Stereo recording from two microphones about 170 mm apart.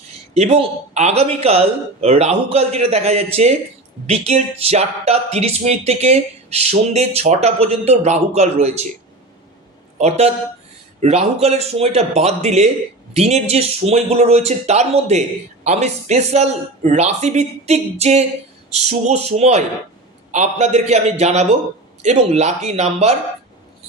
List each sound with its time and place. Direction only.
0.3 s speech: 40° right (ahead or behind)
10.0 s speech: 40° right (ahead or behind)